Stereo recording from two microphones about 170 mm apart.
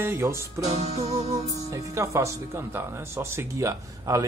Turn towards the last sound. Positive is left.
turn(degrees=-20)  # may be behind; listen again after turning